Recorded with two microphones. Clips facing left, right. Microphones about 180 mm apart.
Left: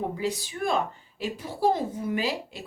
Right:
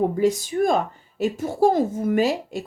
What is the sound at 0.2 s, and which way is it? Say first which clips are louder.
Speech: right 10 dB; 45° right (ahead or behind).